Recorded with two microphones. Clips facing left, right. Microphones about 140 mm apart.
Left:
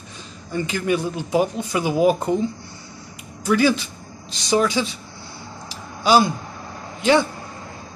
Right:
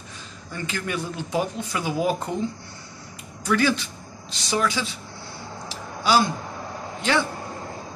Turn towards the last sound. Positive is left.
turn(degrees=15)  # may be behind; listen again after turning